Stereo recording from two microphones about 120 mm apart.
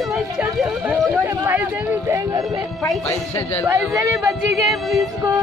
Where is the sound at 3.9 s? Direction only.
25° right (ahead or behind).